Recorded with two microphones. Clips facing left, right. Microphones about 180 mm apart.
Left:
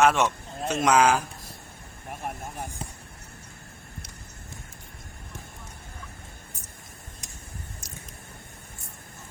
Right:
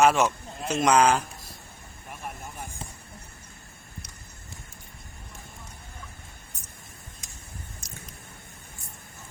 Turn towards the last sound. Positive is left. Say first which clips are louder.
# left 1 dB
turn(degrees=5)  # may be behind; listen again after turning